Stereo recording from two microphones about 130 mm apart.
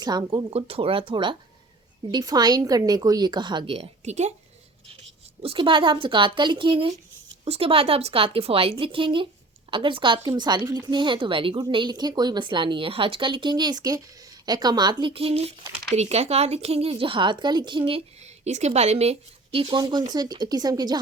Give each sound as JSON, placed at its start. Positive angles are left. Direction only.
{"t": 0.0, "sound": "speech", "side_deg": -30}
{"t": 0.5, "sound": "a woman's voice", "side_deg": -45}
{"t": 3.8, "sound": "a woman's voice", "side_deg": -60}
{"t": 5.4, "sound": "a woman's voice", "side_deg": -45}